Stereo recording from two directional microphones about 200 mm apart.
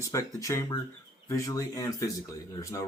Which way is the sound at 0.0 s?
15° left (ahead or behind).